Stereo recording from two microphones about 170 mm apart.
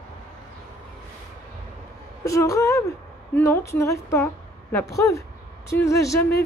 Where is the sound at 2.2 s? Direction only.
20° left (ahead or behind).